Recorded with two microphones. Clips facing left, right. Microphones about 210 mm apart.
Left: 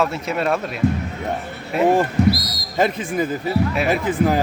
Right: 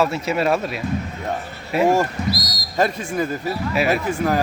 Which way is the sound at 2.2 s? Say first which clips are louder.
Left 6 dB; 60° left (ahead or behind).